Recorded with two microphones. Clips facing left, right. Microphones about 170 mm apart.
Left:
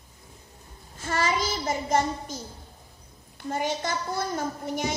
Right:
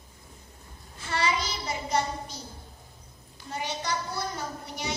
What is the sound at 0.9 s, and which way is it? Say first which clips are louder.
A child's voice: left 2 dB; 45° left (ahead or behind).